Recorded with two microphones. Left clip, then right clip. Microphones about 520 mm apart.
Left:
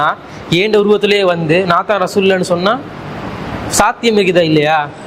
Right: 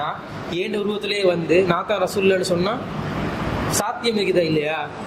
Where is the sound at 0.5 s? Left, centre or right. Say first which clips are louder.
Left 14 dB; left.